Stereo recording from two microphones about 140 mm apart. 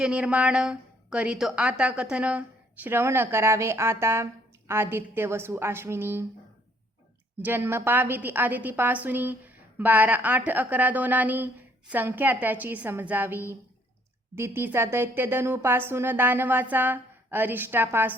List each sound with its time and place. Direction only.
0.0 s a woman's voice: 5° right (ahead or behind)
7.4 s a woman's voice: 15° right (ahead or behind)